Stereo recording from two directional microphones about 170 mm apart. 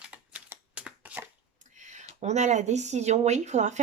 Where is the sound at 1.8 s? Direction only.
45° right (ahead or behind).